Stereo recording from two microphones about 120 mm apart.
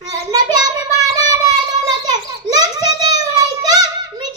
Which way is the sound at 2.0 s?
35° right (ahead or behind).